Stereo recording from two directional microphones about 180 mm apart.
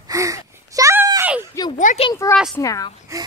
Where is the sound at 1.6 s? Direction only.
20° left (ahead or behind).